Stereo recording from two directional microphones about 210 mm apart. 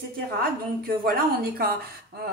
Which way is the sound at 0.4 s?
45° right (ahead or behind).